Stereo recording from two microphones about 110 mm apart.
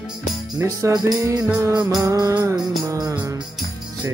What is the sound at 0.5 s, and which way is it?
Music, 30° right (ahead or behind).